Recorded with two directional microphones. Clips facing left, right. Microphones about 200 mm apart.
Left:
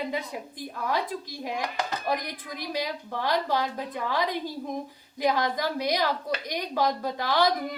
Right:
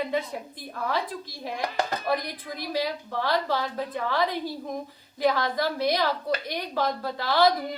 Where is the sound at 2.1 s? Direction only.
15° left (ahead or behind).